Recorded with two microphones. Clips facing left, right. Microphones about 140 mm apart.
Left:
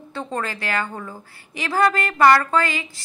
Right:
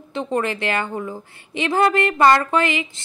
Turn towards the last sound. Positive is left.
turn(degrees=-20)  # may be behind; listen again after turning